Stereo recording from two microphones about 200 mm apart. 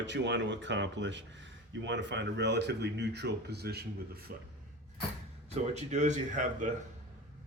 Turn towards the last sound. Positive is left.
turn(degrees=-40)  # may be behind; listen again after turning